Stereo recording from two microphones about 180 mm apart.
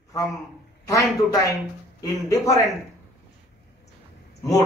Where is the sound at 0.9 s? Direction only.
20° left (ahead or behind).